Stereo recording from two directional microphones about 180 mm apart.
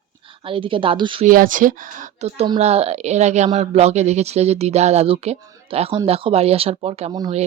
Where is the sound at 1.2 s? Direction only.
50° right (ahead or behind).